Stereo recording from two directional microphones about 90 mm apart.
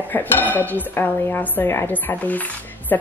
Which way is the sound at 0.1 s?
20° left (ahead or behind).